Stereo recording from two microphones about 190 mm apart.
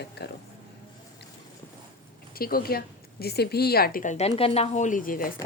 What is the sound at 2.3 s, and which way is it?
A woman's voice, 50° left (ahead or behind).